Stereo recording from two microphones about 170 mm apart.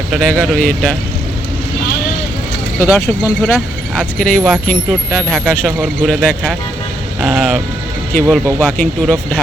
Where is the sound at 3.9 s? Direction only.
5° left (ahead or behind).